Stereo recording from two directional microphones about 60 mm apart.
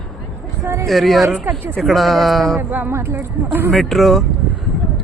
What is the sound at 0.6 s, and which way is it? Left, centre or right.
Speech, right.